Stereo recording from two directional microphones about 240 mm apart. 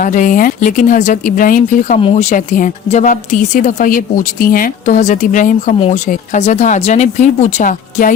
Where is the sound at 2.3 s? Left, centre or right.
Left.